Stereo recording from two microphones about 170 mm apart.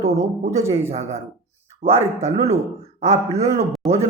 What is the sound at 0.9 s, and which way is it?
A man's voice, 40° right (ahead or behind).